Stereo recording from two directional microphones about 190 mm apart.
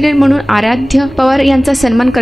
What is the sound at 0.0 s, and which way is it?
A woman's voice, centre (ahead or behind).